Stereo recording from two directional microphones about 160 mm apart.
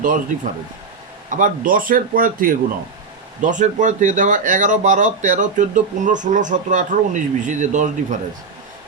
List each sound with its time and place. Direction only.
1.3 s speech: 55° right (ahead or behind)